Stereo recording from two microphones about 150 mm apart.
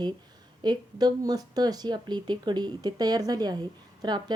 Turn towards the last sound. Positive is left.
turn(degrees=-30)  # may be behind; listen again after turning